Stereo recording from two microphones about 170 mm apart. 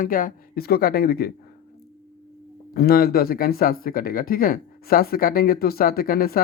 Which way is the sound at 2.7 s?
65° left (ahead or behind).